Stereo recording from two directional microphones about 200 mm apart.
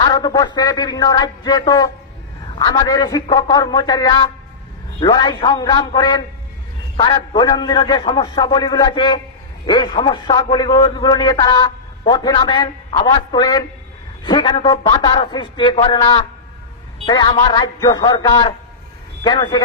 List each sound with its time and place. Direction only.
0.0 s a man's voice: 20° left (ahead or behind)